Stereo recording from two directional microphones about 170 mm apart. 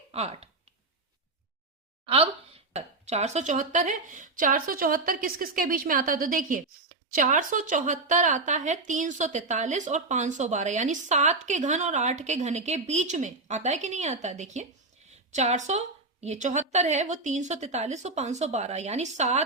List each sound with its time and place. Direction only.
0.1 s speech: 35° right (ahead or behind)
2.0 s a woman's voice: 35° right (ahead or behind)